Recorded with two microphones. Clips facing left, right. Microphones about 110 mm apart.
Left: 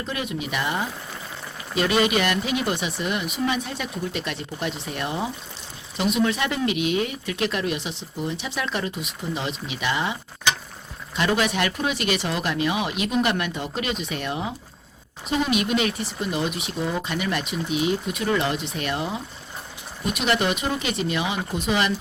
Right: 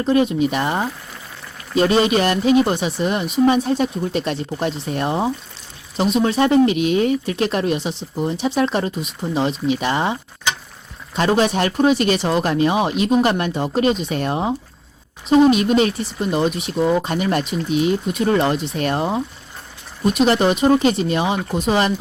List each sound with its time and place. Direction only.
0.0 s speech: 35° right (ahead or behind)